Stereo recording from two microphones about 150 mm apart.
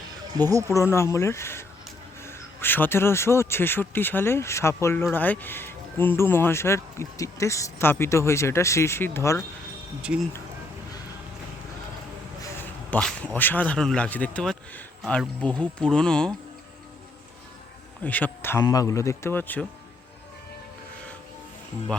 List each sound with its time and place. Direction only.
0.7 s speech: 20° left (ahead or behind)
12.4 s a sound: 15° left (ahead or behind)
13.0 s speech: 5° left (ahead or behind)
18.0 s speech: 10° left (ahead or behind)